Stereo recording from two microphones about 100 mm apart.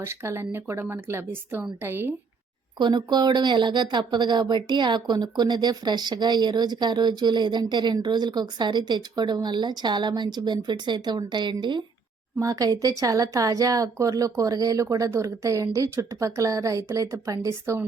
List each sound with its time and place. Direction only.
0.0 s a woman's voice: 25° right (ahead or behind)
2.7 s speech: 50° right (ahead or behind)
12.4 s a woman's voice: 35° right (ahead or behind)